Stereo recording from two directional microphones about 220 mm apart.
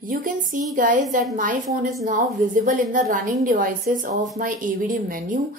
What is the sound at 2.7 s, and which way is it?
A woman's voice, 35° right (ahead or behind).